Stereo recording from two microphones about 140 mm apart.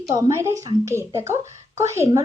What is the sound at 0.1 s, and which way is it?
A woman's voice, 25° right (ahead or behind).